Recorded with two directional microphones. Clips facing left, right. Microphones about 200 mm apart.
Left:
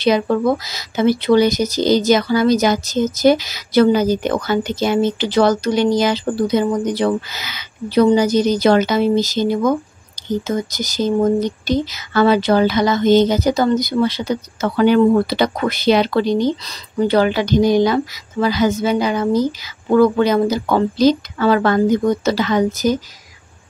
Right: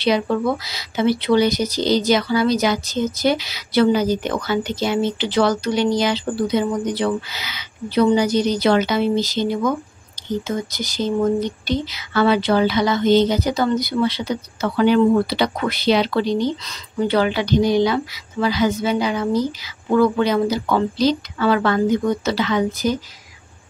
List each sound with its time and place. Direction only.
0.0 s speech: 45° left (ahead or behind)